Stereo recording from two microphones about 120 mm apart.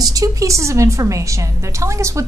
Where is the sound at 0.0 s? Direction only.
30° right (ahead or behind).